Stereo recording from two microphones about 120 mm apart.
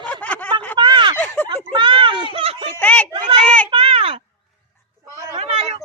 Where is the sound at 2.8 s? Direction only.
10° left (ahead or behind).